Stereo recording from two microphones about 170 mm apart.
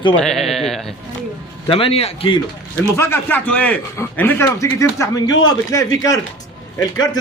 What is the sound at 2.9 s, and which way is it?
A man's voice, 15° left (ahead or behind).